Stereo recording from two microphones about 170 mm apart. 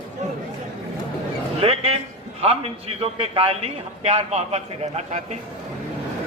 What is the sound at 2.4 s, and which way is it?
A man's voice, 35° right (ahead or behind).